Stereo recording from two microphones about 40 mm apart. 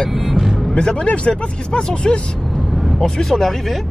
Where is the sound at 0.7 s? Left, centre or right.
Left.